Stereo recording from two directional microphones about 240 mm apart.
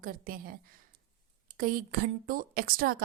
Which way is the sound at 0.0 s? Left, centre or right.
Right.